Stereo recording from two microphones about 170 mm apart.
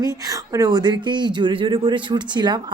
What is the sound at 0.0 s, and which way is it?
A woman's voice, 20° right (ahead or behind).